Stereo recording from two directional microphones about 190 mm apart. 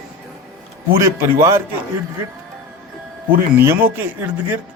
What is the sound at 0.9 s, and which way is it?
Speech, 15° right (ahead or behind).